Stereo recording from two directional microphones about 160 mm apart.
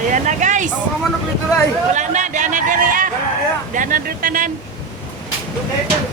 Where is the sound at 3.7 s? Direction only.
55° right (ahead or behind).